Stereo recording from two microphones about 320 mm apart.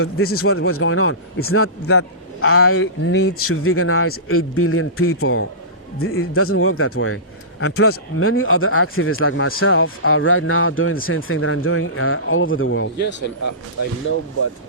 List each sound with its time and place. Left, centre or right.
0.0 s speech: left